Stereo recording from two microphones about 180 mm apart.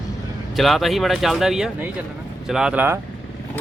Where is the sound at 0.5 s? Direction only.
Centre (ahead or behind).